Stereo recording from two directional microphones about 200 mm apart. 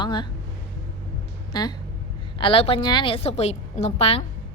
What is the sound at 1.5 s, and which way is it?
Speech, 20° left (ahead or behind).